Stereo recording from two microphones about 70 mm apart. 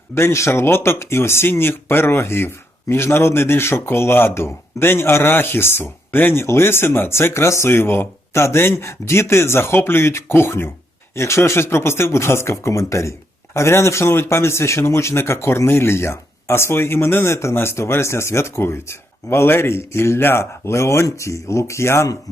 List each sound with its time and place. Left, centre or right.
0.1 s speech: left